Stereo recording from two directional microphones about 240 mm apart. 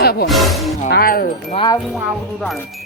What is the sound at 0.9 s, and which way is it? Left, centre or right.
Speech, left.